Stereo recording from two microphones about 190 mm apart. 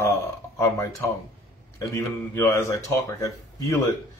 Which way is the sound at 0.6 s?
15° left (ahead or behind).